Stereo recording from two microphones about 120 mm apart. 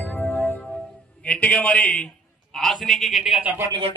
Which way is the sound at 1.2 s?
10° left (ahead or behind).